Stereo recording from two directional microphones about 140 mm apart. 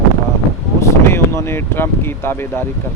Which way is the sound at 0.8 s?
20° left (ahead or behind).